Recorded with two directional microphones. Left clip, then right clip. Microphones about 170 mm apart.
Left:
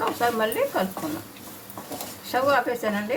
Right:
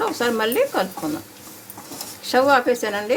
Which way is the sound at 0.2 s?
70° right (ahead or behind).